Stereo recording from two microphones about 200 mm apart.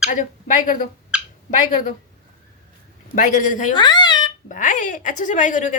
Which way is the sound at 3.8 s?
20° left (ahead or behind).